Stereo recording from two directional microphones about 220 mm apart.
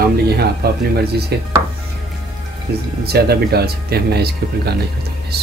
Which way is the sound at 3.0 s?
45° right (ahead or behind).